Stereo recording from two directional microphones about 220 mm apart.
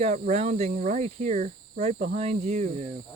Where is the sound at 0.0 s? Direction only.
30° right (ahead or behind).